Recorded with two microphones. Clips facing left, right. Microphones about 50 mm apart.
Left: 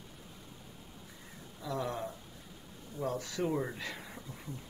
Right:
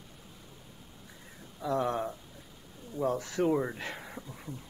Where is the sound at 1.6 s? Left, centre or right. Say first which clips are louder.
Right 6 dB; right.